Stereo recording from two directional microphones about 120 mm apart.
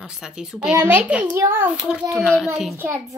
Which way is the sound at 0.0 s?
5° right (ahead or behind).